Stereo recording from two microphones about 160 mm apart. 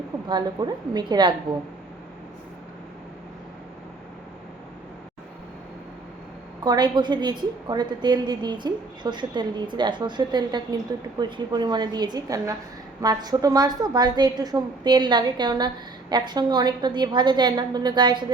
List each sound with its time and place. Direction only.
0.3 s a woman's voice: 25° right (ahead or behind)
6.7 s a woman's voice: 25° right (ahead or behind)